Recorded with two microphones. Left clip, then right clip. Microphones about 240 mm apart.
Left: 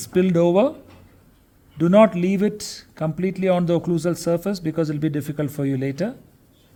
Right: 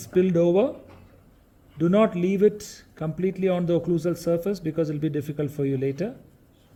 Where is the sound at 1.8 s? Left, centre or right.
Left.